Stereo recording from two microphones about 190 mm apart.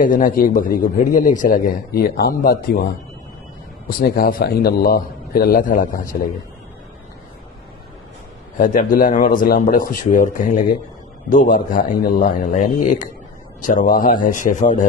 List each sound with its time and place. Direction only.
0.0 s a man's voice: 45° left (ahead or behind)
4.0 s a man's voice: 50° left (ahead or behind)
8.5 s a man's voice: 45° left (ahead or behind)